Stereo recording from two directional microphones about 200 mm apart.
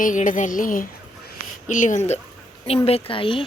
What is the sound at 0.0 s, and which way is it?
A woman's voice, 40° left (ahead or behind).